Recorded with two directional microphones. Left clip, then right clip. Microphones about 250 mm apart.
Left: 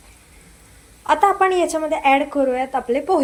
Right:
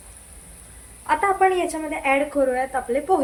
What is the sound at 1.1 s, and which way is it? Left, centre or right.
Speech, left.